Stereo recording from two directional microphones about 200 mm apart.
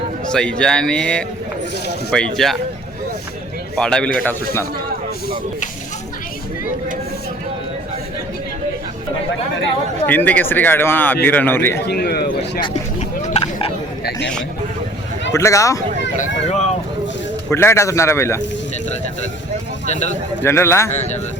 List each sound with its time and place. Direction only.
0.3 s speech: 5° left (ahead or behind)
3.8 s speech: 5° left (ahead or behind)
10.1 s speech: 10° left (ahead or behind)
11.9 s speech: 55° left (ahead or behind)
12.6 s a sound: 30° left (ahead or behind)
15.3 s speech: 15° left (ahead or behind)
16.1 s speech: 40° left (ahead or behind)
17.5 s speech: 10° left (ahead or behind)
20.4 s speech: 10° left (ahead or behind)